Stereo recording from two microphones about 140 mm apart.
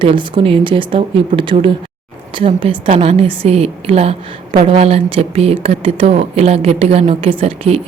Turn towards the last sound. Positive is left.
turn(degrees=-45)  # may be behind; listen again after turning